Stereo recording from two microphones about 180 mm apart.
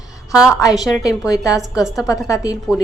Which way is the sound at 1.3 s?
20° left (ahead or behind).